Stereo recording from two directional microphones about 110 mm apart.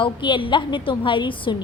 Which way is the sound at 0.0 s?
45° left (ahead or behind).